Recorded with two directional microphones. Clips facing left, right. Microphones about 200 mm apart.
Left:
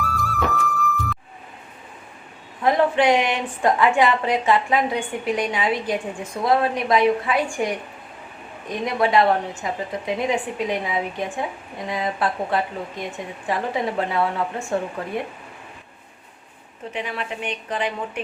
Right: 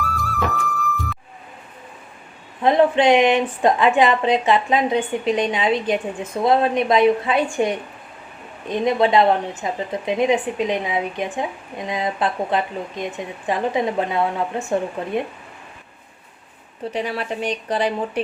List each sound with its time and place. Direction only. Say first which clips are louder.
0.0 s music: even; centre (ahead or behind)
2.6 s a woman's voice: right 3 dB; 20° right (ahead or behind)
16.9 s speech: right 4 dB; 35° right (ahead or behind)